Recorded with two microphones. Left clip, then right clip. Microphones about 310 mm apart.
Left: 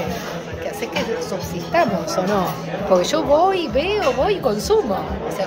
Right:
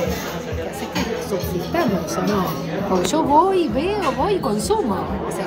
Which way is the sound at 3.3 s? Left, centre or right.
Centre.